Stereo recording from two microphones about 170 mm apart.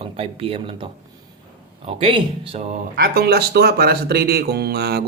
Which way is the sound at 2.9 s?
65° right (ahead or behind).